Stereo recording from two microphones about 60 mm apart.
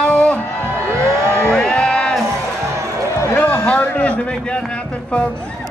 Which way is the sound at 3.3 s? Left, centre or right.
Left.